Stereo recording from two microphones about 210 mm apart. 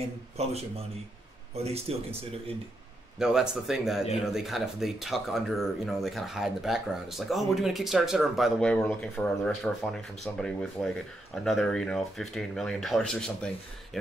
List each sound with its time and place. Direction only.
0.4 s speech: 30° right (ahead or behind)
3.2 s speech: centre (ahead or behind)